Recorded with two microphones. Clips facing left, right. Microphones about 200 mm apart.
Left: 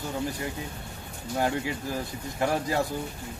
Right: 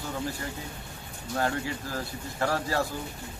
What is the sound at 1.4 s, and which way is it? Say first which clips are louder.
A man's voice: left 2 dB; 15° left (ahead or behind).